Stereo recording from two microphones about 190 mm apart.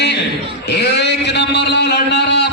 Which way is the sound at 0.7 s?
65° left (ahead or behind).